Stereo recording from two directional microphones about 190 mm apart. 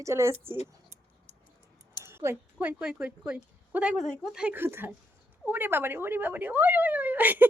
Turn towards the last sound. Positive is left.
turn(degrees=-10)  # may be behind; listen again after turning